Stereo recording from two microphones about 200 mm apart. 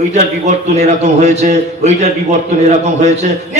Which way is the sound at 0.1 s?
35° right (ahead or behind).